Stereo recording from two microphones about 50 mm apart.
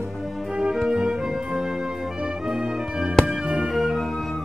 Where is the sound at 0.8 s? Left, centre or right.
Centre.